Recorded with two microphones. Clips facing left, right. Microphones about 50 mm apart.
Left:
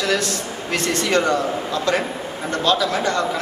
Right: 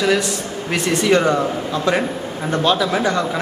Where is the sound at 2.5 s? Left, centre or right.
Centre.